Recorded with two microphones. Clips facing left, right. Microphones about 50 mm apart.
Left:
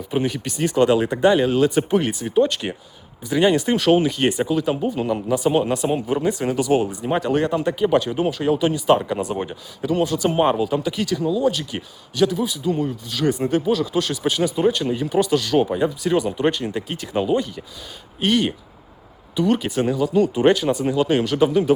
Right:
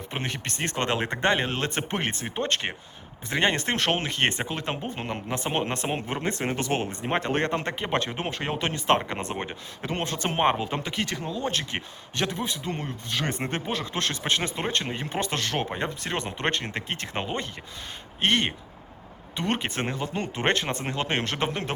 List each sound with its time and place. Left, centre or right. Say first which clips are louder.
0.1 s speech: left 9 dB; right
3.2 s speech: left 7 dB; right
7.3 s speech: left 6 dB; right
9.0 s speech: left 7 dB; right
9.8 s speech: left 9 dB; right